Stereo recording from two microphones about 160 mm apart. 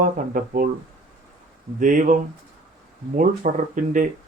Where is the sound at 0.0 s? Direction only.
60° right (ahead or behind).